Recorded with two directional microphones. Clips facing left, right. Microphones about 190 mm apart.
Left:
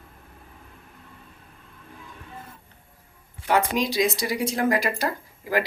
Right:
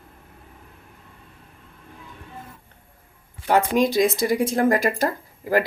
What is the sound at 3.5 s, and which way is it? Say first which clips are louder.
Speech: right 5 dB; 50° right (ahead or behind).